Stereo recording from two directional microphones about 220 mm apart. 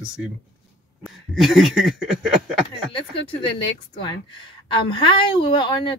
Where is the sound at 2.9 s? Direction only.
20° left (ahead or behind).